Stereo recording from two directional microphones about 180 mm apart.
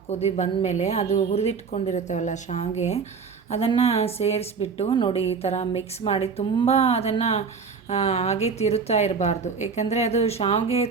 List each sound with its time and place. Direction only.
0.1 s a woman's voice: 35° left (ahead or behind)